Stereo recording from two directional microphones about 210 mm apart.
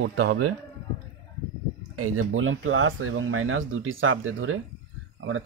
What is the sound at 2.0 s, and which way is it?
Speech, 80° right.